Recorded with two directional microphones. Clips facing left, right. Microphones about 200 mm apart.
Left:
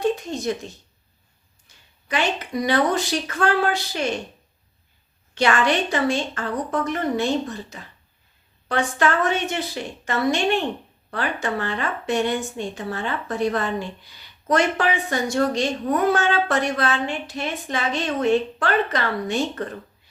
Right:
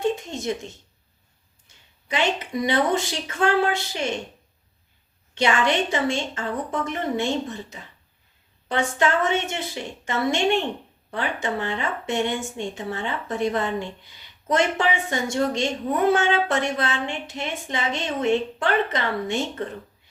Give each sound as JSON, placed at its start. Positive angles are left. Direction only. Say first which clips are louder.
{"t": 0.0, "sound": "a sound", "louder": "left 2 dB", "side_deg": -25}
{"t": 1.6, "sound": "speech", "louder": "left 2 dB", "side_deg": -20}
{"t": 5.3, "sound": "speech", "louder": "left 1 dB", "side_deg": -20}